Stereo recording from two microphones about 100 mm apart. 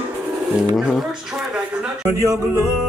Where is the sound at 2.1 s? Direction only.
30° right (ahead or behind).